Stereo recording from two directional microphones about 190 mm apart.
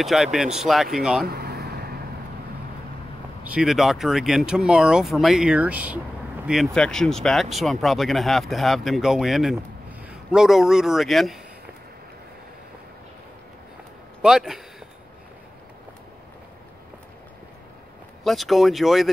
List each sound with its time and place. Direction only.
0.0 s speech: centre (ahead or behind)
1.2 s vehicle: 55° right (ahead or behind)
3.4 s a man's voice: 5° right (ahead or behind)
14.2 s speech: centre (ahead or behind)
18.2 s speech: centre (ahead or behind)